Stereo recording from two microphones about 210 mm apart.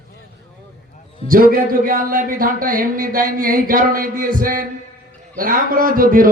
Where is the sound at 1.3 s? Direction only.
40° right (ahead or behind).